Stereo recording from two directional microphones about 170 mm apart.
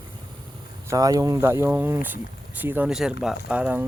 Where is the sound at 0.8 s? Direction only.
20° right (ahead or behind).